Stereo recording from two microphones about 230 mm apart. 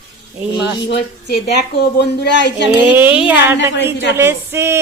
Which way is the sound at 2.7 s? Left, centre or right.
Centre.